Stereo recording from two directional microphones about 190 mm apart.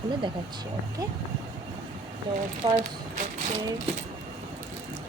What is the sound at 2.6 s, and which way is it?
Speech, 35° right (ahead or behind).